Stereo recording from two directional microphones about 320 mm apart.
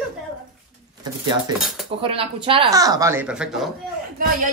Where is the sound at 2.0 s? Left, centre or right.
Centre.